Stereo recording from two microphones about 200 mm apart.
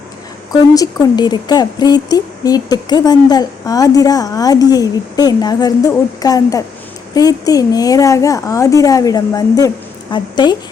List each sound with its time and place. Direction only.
0.5 s a woman's voice: 20° left (ahead or behind)